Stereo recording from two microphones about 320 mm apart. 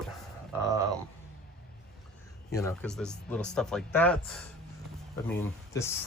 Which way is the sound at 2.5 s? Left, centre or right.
Centre.